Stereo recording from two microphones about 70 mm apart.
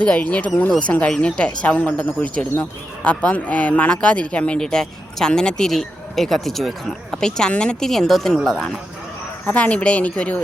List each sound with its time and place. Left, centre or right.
0.0 s speech: centre
9.5 s speech: centre